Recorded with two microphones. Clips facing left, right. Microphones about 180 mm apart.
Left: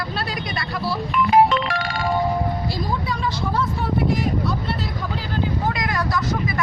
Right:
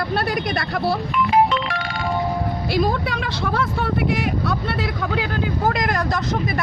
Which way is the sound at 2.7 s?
70° right (ahead or behind).